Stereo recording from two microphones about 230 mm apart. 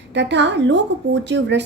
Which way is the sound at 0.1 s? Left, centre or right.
Right.